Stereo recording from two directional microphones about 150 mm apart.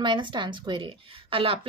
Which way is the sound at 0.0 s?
30° right (ahead or behind).